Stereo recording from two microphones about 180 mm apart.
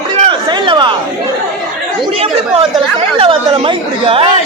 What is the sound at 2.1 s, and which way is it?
Chatter, 30° right (ahead or behind).